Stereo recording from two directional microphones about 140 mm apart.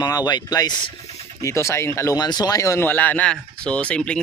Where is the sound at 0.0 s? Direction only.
30° left (ahead or behind).